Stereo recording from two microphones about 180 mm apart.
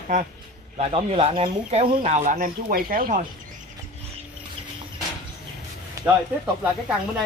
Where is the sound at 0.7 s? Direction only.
35° right (ahead or behind).